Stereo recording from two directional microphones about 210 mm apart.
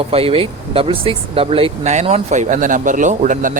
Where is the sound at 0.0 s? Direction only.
25° right (ahead or behind).